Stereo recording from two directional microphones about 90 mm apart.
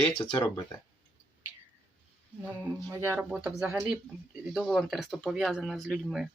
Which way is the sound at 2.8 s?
30° right (ahead or behind).